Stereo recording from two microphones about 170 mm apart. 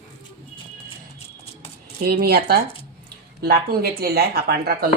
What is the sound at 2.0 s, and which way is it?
Speech, 65° right (ahead or behind).